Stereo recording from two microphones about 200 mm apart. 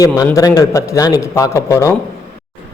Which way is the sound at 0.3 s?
15° left (ahead or behind).